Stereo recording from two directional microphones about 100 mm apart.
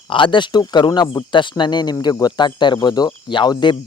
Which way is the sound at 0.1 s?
55° left (ahead or behind).